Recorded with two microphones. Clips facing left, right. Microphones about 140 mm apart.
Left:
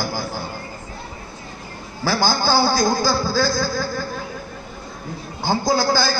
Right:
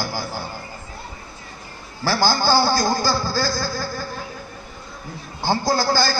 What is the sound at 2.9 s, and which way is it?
Speech, 15° left (ahead or behind).